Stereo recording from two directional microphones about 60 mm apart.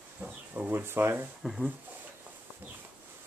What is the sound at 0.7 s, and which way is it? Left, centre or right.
Speech, right.